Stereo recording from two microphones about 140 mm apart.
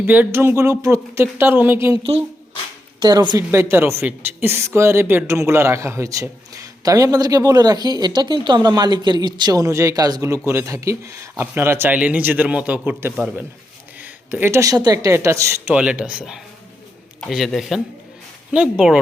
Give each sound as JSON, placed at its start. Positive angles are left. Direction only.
{"t": 0.0, "sound": "speech", "side_deg": -15}
{"t": 3.0, "sound": "a woman's voice", "side_deg": -30}
{"t": 3.5, "sound": "speech", "side_deg": -15}
{"t": 15.7, "sound": "speech", "side_deg": -10}